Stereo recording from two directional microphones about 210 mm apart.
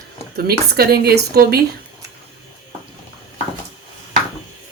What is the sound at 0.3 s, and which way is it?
Speech, 50° right (ahead or behind).